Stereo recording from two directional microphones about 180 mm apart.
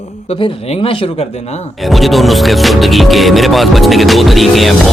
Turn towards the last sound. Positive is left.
turn(degrees=0)  # may be behind; listen again after turning